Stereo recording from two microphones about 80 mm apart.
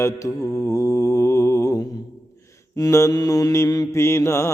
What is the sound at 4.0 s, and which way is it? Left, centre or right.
Mantra, left.